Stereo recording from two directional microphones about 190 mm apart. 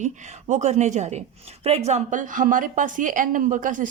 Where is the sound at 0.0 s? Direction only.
40° right (ahead or behind).